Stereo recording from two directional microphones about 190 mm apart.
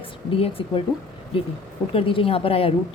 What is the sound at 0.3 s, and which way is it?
Speech, 30° left (ahead or behind).